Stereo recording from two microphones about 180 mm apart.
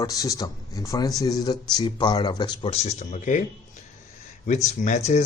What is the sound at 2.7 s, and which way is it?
Speech, 40° left (ahead or behind).